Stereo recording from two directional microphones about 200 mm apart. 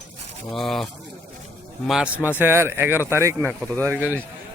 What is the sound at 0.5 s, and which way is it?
Speech, centre (ahead or behind).